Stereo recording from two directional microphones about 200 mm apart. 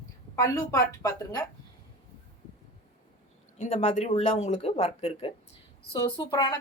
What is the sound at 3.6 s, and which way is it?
A woman's voice, 35° left (ahead or behind).